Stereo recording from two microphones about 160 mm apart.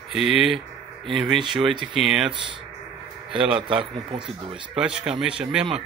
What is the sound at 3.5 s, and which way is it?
Speech, 30° right (ahead or behind).